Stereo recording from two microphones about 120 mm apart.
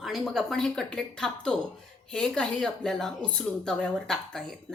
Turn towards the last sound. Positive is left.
turn(degrees=5)  # may be behind; listen again after turning